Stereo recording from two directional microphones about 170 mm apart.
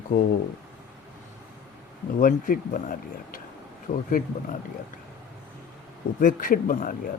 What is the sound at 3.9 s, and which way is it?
Speech, 40° left (ahead or behind).